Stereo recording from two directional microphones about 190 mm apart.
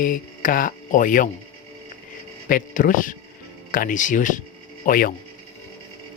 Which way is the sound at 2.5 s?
45° left (ahead or behind).